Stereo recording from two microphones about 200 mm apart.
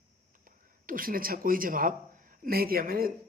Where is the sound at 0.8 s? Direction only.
45° right (ahead or behind).